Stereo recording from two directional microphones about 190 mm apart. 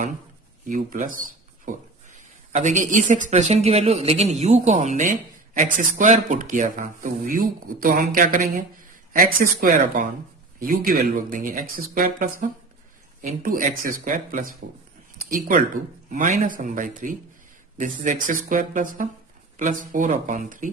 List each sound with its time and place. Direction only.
0.7 s speech: 40° right (ahead or behind)